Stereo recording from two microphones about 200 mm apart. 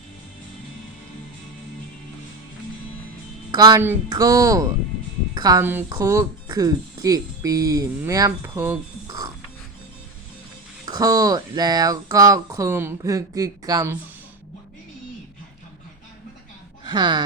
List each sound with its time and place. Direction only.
3.5 s speech: 20° right (ahead or behind)
10.8 s speech: 20° right (ahead or behind)
16.8 s speech: 20° right (ahead or behind)